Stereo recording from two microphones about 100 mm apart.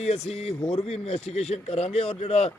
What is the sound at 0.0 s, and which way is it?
Speech, 90° left.